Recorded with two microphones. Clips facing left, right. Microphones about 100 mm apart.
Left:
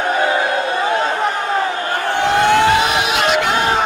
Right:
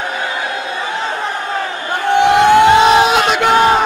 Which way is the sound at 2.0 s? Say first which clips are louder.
Right 5 dB; 20° right (ahead or behind).